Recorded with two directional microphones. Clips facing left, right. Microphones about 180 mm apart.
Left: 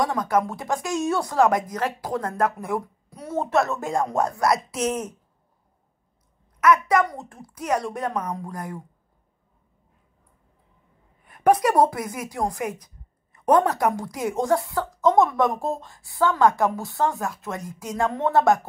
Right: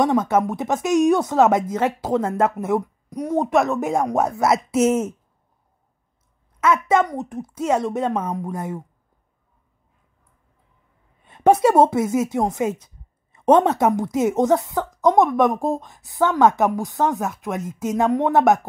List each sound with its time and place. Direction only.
0.0 s a woman's voice: 20° right (ahead or behind)
6.6 s a woman's voice: 25° right (ahead or behind)
11.2 s a woman's voice: 25° right (ahead or behind)